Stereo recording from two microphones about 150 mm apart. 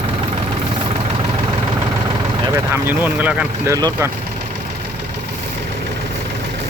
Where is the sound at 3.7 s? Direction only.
20° right (ahead or behind).